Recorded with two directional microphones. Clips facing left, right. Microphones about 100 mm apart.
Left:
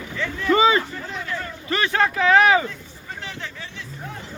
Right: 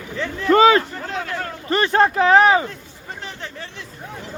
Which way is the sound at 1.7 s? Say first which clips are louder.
Right 5 dB; 40° right (ahead or behind).